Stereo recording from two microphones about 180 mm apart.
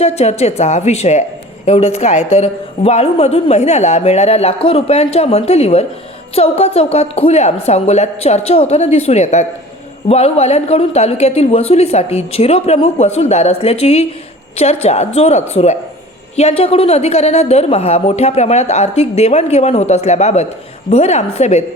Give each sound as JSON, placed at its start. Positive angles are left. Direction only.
{"t": 0.0, "sound": "a woman's voice", "side_deg": 35}